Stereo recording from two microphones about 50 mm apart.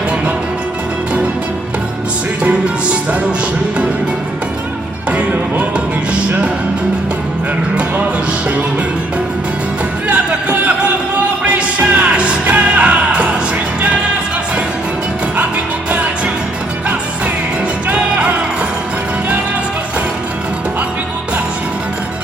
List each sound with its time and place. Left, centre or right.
2.4 s music: right
10.1 s music: right
15.9 s music: right